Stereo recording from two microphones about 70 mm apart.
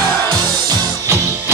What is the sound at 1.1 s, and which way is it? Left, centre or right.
Music, right.